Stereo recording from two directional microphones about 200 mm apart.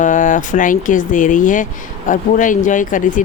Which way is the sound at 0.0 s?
40° left (ahead or behind).